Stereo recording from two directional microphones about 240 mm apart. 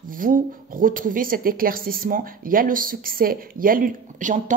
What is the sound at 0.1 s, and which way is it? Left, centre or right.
A woman's voice, right.